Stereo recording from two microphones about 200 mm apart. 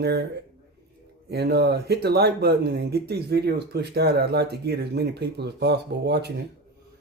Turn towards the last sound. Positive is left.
turn(degrees=-55)  # may be behind; listen again after turning